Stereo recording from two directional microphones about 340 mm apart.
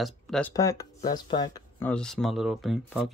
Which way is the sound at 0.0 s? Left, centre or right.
Centre.